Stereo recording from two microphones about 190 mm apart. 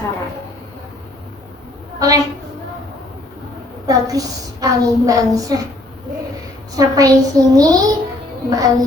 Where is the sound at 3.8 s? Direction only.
20° right (ahead or behind).